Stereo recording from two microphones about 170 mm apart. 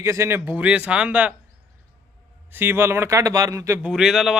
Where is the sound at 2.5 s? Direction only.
15° right (ahead or behind).